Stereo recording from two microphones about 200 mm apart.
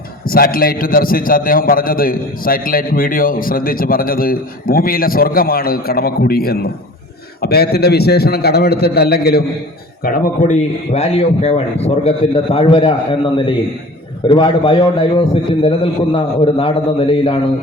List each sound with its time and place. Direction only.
0.3 s a man's voice: 45° left (ahead or behind); by 17.4 s 25° left (ahead or behind)